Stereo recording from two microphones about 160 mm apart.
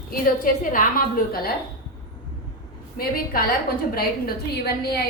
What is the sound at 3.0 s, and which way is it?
Speech, 65° left (ahead or behind).